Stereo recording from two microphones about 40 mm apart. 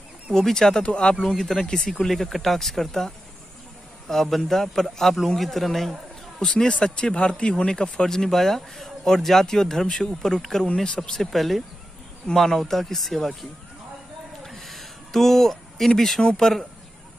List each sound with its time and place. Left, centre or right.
0.3 s speech: centre
1.2 s speech: centre
4.1 s speech: centre
6.4 s speech: left; by 13.3 s centre
14.4 s a sound: centre
16.2 s speech: centre